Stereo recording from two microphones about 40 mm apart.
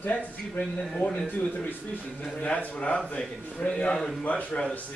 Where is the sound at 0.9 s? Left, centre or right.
Left.